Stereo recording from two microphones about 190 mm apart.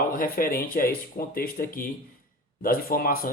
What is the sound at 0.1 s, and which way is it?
Speech, 50° left (ahead or behind).